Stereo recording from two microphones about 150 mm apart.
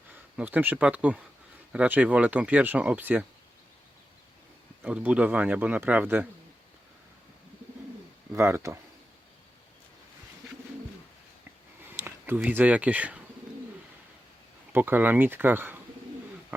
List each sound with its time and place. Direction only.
0.3 s speech: 10° right (ahead or behind)
4.8 s speech: 10° right (ahead or behind)
8.3 s speech: 15° right (ahead or behind)
11.8 s a sound: 15° right (ahead or behind)
12.4 s speech: 10° right (ahead or behind)
14.7 s speech: 15° right (ahead or behind)